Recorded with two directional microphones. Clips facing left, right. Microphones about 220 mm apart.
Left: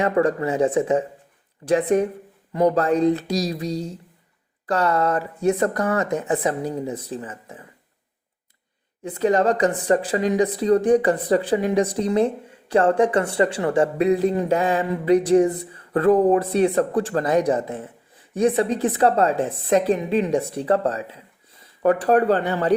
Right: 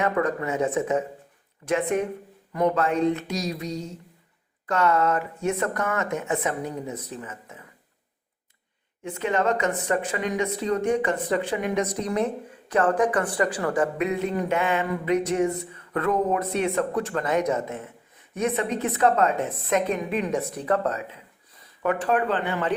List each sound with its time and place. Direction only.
0.0 s a woman's voice: 30° left (ahead or behind)
9.0 s a woman's voice: 35° left (ahead or behind)